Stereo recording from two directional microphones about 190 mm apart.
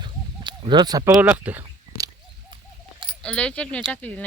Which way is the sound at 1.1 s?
10° right (ahead or behind).